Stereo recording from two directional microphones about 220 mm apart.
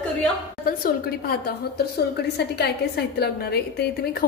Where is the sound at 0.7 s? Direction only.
40° left (ahead or behind).